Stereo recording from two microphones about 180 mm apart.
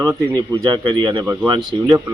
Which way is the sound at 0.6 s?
25° right (ahead or behind).